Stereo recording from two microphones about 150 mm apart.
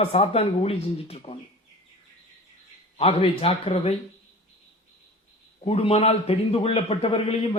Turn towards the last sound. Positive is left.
turn(degrees=40)  # may be behind; listen again after turning